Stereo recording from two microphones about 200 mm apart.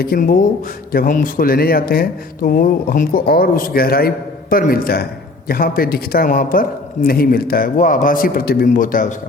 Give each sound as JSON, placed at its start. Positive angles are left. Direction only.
{"t": 0.0, "sound": "speech", "side_deg": 50}